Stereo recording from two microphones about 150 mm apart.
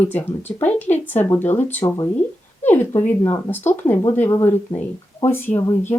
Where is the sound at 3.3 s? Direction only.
15° left (ahead or behind).